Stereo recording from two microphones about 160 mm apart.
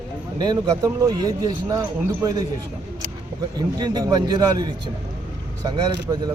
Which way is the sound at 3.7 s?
25° right (ahead or behind).